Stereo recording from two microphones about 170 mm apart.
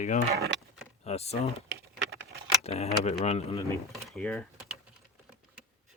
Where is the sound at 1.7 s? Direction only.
90° right.